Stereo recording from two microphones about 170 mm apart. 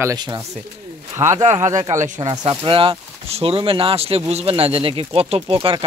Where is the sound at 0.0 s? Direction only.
25° right (ahead or behind).